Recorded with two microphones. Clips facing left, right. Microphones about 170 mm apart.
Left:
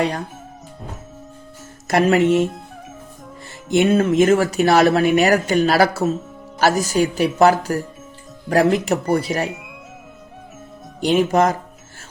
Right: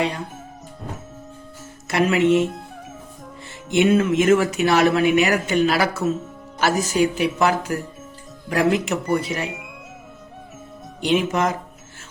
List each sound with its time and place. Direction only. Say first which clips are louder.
1.9 s speech: left 2 dB; 40° left (ahead or behind)
3.7 s speech: left 1 dB; 40° left (ahead or behind)
9.5 s music: left 1 dB; centre (ahead or behind)
11.0 s speech: left 4 dB; 40° left (ahead or behind)